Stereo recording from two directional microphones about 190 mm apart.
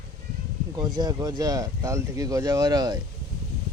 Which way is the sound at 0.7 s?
20° right (ahead or behind).